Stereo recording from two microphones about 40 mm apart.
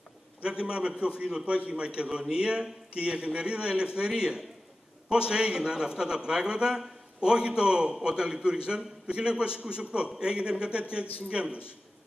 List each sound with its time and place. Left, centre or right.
0.4 s a man's voice: right